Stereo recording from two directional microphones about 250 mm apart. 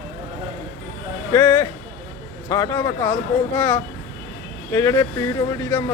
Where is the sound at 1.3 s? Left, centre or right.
Centre.